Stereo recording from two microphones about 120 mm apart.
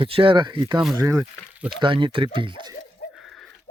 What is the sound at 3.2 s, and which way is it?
Livestock, centre (ahead or behind).